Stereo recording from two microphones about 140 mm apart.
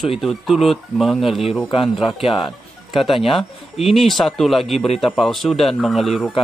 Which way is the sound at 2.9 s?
40° left (ahead or behind).